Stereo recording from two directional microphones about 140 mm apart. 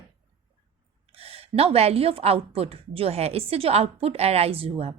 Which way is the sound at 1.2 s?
45° right (ahead or behind).